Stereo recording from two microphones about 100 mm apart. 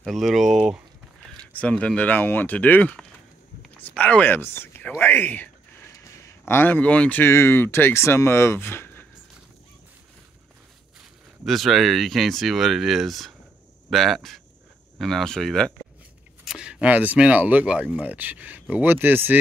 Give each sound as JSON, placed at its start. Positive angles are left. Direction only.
{"t": 0.0, "sound": "speech", "side_deg": 0}
{"t": 1.4, "sound": "speech", "side_deg": 15}
{"t": 11.4, "sound": "speech", "side_deg": 0}
{"t": 16.4, "sound": "speech", "side_deg": -5}